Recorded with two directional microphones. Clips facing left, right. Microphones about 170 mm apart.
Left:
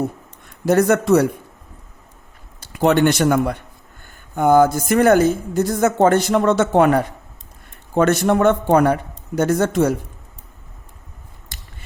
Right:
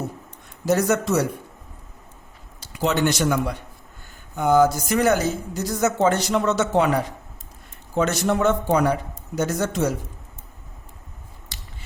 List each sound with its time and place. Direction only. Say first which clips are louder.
0.6 s a man's voice: left 5 dB; 55° left (ahead or behind)
2.6 s a woman's voice: left 7 dB; 55° left (ahead or behind)
11.5 s a sound: left 1 dB; 50° left (ahead or behind)